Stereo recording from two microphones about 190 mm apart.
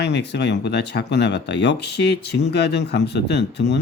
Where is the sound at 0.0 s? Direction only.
65° left (ahead or behind).